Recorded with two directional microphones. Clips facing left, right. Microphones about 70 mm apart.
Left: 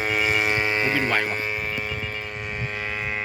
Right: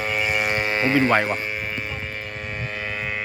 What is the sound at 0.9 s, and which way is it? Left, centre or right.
Speech, right.